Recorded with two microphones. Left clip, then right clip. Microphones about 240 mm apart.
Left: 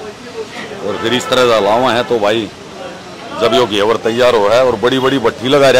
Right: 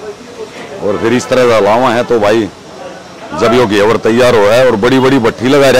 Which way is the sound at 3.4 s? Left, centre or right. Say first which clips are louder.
Right 3 dB; right.